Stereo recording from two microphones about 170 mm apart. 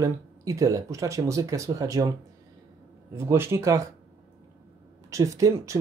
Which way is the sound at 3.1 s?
15° right (ahead or behind).